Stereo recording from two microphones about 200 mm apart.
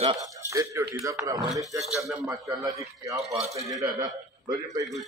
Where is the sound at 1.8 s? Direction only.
Centre (ahead or behind).